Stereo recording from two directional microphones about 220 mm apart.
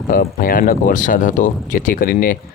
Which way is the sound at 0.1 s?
40° left (ahead or behind).